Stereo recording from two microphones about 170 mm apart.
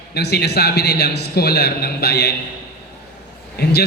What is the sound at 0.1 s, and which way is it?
A man's voice, 70° left (ahead or behind).